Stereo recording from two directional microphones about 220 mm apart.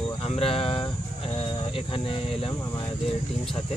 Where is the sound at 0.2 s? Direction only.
25° left (ahead or behind).